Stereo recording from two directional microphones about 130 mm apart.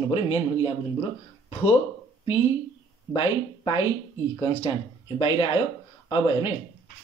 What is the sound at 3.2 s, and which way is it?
Speech, 45° left (ahead or behind).